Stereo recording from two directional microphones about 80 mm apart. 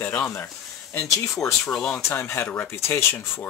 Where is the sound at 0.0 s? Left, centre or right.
Left.